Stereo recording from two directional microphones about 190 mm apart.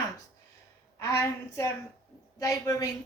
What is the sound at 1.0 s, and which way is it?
A woman's voice, 15° left (ahead or behind).